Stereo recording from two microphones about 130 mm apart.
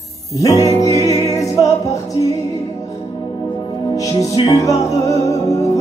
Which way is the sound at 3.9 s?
25° left (ahead or behind).